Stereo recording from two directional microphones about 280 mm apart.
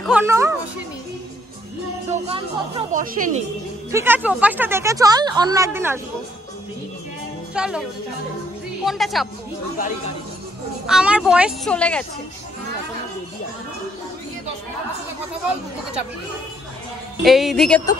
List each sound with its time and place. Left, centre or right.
0.0 s speech: centre
2.0 s speech: centre
3.9 s speech: centre
7.5 s speech: centre
8.8 s speech: centre
9.8 s speech: left
10.9 s speech: centre
17.2 s speech: centre